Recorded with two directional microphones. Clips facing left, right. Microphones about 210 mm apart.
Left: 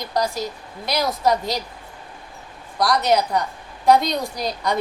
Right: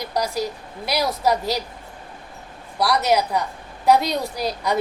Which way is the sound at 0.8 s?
5° right (ahead or behind).